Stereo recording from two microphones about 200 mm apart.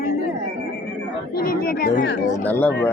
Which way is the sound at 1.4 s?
45° left (ahead or behind).